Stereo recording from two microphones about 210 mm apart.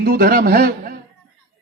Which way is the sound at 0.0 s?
45° right (ahead or behind).